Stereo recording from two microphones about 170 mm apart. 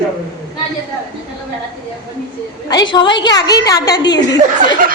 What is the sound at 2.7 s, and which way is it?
A woman's voice, 25° left (ahead or behind).